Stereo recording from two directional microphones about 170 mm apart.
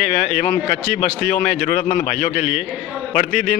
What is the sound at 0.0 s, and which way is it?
A man's voice, 50° left (ahead or behind).